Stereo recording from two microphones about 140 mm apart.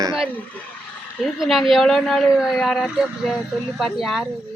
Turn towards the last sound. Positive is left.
turn(degrees=0)  # may be behind; listen again after turning